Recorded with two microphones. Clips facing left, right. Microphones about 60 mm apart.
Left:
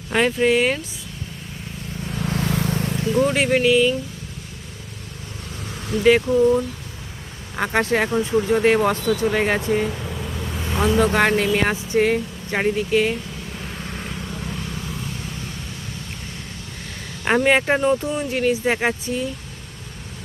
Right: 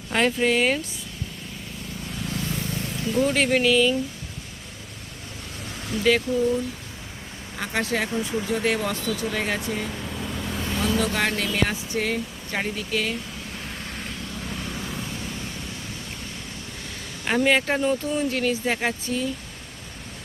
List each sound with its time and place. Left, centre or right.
0.1 s speech: centre
2.2 s vehicle: left
2.7 s vehicle: left
3.0 s speech: centre
6.0 s speech: left
9.6 s speech: left
9.9 s vehicle: centre
10.8 s speech: left
13.5 s vehicle: centre
14.5 s vehicle: centre
17.2 s speech: left